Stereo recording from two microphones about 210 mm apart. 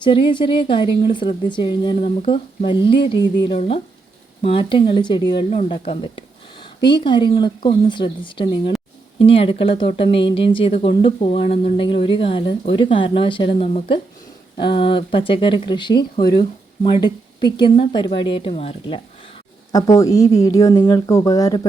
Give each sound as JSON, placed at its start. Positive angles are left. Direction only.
{"t": 0.0, "sound": "speech", "side_deg": 20}
{"t": 19.7, "sound": "speech", "side_deg": 15}